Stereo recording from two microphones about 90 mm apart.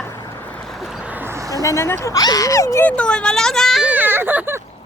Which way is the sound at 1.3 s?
40° right (ahead or behind).